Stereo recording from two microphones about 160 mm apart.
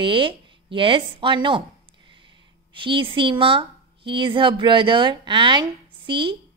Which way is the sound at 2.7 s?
30° right (ahead or behind).